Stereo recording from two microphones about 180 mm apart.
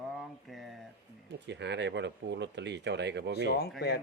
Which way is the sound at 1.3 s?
75° right (ahead or behind).